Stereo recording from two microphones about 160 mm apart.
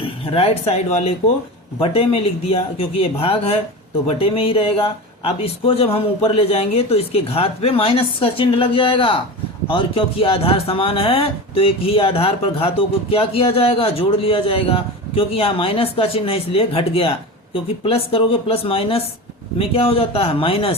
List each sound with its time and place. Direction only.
0.3 s speech: 40° left (ahead or behind)